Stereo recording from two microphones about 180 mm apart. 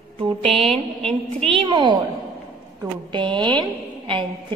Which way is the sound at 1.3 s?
30° right (ahead or behind).